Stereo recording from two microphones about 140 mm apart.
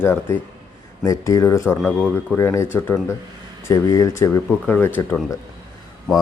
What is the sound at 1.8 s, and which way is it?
Speech, 5° left (ahead or behind).